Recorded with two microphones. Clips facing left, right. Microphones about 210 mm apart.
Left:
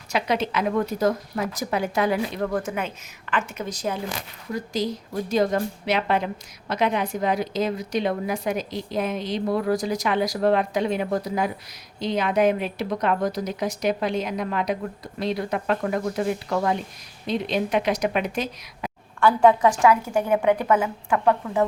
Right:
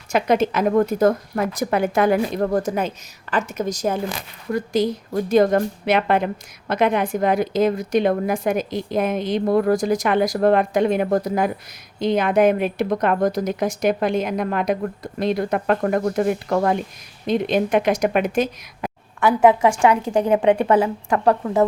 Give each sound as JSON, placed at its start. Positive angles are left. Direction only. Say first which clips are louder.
{"t": 0.1, "sound": "a woman's voice", "louder": "right 6 dB", "side_deg": -50}
{"t": 4.5, "sound": "a woman's voice", "louder": "right 6 dB", "side_deg": -55}
{"t": 19.2, "sound": "a woman's voice", "louder": "right 2 dB", "side_deg": -20}